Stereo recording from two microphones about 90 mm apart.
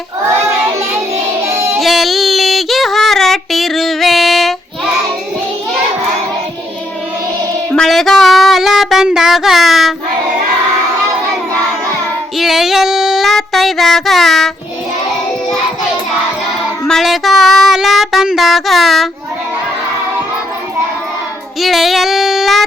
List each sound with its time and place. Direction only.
1.5 s child singing: 30° right (ahead or behind)
1.8 s female singing: centre (ahead or behind)
7.7 s a sound: 5° left (ahead or behind)
12.4 s child singing: 5° right (ahead or behind)
16.8 s child singing: 5° left (ahead or behind)
21.6 s child singing: centre (ahead or behind)